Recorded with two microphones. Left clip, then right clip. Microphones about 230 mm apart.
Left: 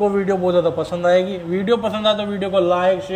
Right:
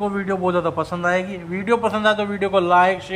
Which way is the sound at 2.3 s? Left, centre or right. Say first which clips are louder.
Right 2 dB; centre.